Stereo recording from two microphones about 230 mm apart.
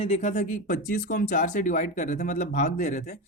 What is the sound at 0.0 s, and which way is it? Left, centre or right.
Speech, left.